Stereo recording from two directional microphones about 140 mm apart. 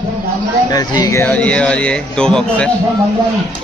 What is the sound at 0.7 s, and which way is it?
Speech, 25° left (ahead or behind).